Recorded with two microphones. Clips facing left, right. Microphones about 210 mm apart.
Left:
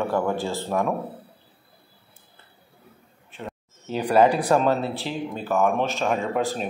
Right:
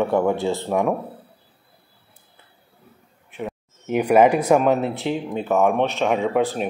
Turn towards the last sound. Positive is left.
turn(degrees=-5)  # may be behind; listen again after turning